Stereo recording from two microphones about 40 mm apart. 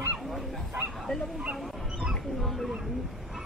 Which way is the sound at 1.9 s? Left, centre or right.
Centre.